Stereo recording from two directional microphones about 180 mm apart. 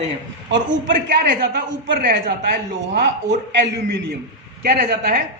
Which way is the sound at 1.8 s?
65° right (ahead or behind).